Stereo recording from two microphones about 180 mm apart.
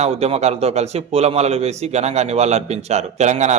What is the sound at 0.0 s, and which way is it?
A man's voice, 35° right (ahead or behind).